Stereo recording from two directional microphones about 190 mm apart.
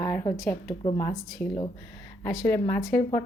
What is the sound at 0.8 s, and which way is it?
Speech, 20° left (ahead or behind).